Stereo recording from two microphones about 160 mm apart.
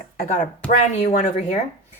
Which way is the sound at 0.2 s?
55° left (ahead or behind).